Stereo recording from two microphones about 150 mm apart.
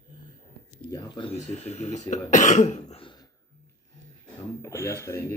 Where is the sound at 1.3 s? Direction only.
50° left (ahead or behind).